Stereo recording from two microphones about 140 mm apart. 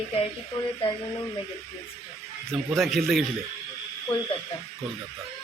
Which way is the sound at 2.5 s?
Centre (ahead or behind).